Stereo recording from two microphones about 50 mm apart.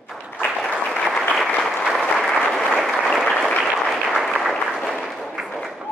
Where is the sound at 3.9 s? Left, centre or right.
Centre.